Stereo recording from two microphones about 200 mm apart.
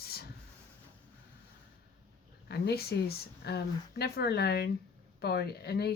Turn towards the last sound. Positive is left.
turn(degrees=55)  # may be behind; listen again after turning